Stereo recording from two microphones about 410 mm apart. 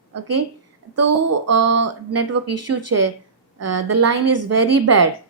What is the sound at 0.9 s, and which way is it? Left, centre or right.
Speech, right.